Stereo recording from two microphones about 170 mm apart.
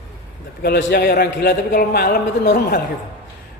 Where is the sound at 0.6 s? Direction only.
85° left.